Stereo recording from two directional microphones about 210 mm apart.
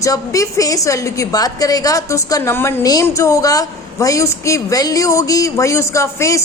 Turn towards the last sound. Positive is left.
turn(degrees=15)  # may be behind; listen again after turning